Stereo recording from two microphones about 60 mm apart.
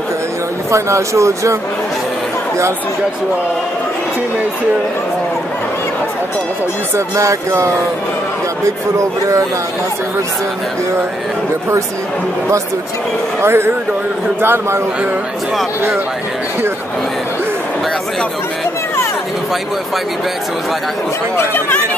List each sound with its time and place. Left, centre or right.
0.7 s speech: right
7.2 s speech: right
13.4 s a man's voice: right
21.4 s speech: left